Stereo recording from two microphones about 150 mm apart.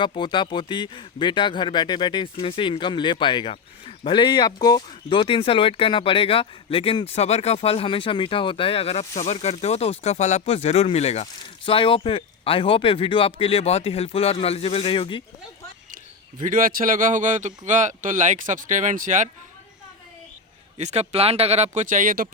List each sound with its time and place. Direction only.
0.1 s speech: 30° left (ahead or behind)
16.4 s speech: 65° right (ahead or behind)
20.7 s speech: 45° right (ahead or behind); by 22.3 s 65° right (ahead or behind)